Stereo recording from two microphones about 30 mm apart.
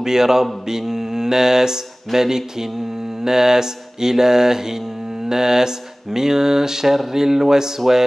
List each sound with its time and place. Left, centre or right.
0.0 s mantra: centre